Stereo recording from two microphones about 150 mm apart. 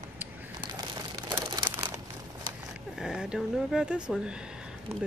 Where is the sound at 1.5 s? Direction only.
25° right (ahead or behind).